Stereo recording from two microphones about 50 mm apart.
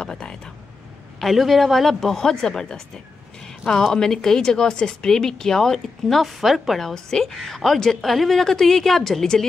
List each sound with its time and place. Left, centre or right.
0.0 s speech: centre
1.2 s a woman's voice: centre